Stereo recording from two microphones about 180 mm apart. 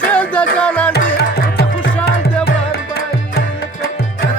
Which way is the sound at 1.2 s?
55° left (ahead or behind).